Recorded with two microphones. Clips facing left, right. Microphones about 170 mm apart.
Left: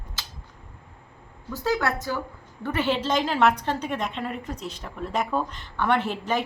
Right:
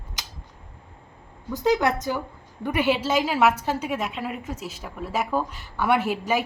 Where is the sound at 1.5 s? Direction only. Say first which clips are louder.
Right 4 dB; 20° right (ahead or behind).